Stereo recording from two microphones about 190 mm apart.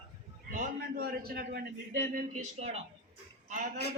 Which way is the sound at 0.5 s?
50° right (ahead or behind).